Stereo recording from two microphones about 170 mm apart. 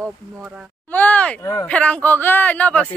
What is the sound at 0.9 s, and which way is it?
Speech, 10° left (ahead or behind).